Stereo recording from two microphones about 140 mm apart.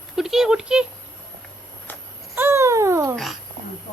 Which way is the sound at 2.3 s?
20° right (ahead or behind).